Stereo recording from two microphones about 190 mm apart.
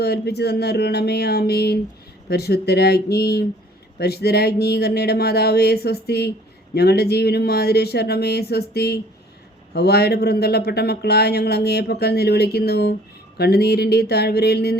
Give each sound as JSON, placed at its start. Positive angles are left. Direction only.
{"t": 0.0, "sound": "speech", "side_deg": 60}